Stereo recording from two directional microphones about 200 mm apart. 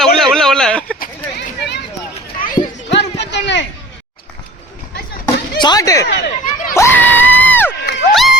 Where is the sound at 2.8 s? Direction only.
60° left (ahead or behind).